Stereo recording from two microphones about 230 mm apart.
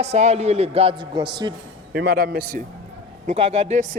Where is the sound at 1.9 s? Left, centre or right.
Right.